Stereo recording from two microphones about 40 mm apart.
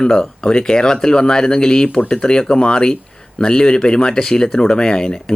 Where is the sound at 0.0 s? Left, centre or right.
Centre.